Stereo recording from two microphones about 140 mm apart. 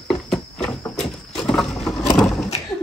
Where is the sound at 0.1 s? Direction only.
5° left (ahead or behind).